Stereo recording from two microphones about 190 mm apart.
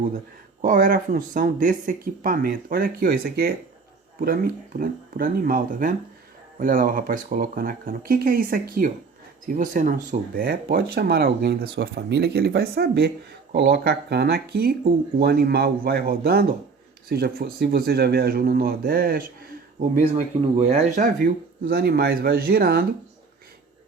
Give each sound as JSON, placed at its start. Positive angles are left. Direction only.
{"t": 0.6, "sound": "speech", "side_deg": -45}
{"t": 20.1, "sound": "speech", "side_deg": -35}
{"t": 21.6, "sound": "speech", "side_deg": -55}